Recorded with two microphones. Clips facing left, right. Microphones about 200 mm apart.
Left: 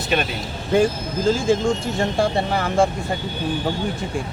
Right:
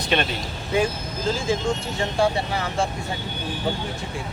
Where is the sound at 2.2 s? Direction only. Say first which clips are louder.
Left 2 dB; 55° left (ahead or behind).